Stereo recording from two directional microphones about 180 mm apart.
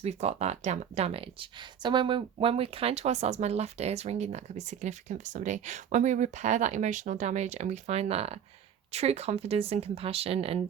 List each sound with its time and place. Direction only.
0.0 s speech: 40° right (ahead or behind)